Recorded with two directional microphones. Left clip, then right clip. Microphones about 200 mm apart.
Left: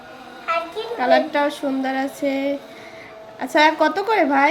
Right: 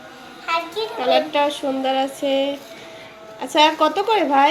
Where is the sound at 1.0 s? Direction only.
30° left (ahead or behind).